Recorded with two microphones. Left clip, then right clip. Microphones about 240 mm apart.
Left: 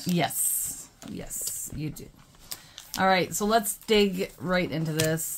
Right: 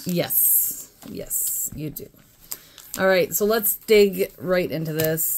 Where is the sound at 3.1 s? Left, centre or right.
Centre.